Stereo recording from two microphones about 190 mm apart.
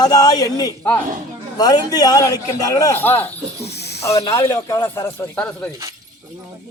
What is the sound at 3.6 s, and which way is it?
Snake, 60° left (ahead or behind).